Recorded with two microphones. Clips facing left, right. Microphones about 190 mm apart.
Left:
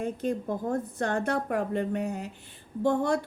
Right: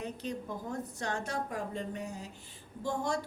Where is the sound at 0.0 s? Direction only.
50° left (ahead or behind).